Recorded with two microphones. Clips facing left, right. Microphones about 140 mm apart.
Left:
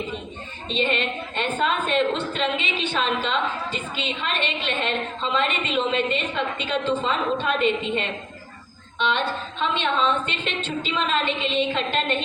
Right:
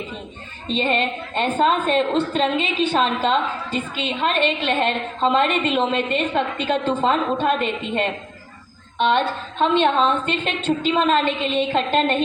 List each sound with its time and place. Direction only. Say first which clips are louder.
0.7 s a woman's voice: right 3 dB; 40° right (ahead or behind)